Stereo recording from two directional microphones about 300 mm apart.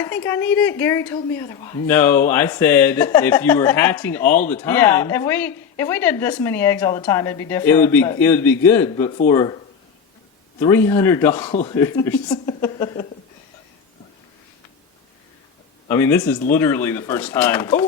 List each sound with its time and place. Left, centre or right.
0.0 s speech: centre
10.6 s speech: centre
11.4 s a man's voice: centre
11.8 s speech: centre
15.9 s speech: centre